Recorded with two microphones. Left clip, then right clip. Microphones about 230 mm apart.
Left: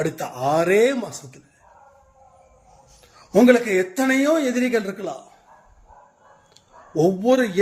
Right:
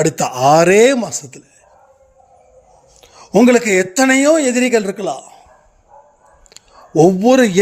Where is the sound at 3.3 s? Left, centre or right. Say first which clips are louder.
Right 4 dB; right.